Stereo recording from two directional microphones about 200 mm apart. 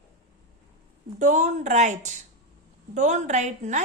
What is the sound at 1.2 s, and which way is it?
Speech, 35° right (ahead or behind).